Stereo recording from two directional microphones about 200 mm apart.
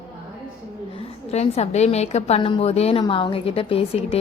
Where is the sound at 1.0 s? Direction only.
30° left (ahead or behind).